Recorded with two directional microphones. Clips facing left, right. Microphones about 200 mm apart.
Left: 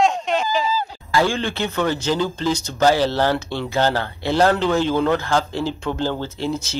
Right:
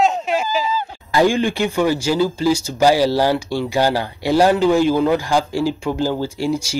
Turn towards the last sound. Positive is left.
turn(degrees=-10)  # may be behind; listen again after turning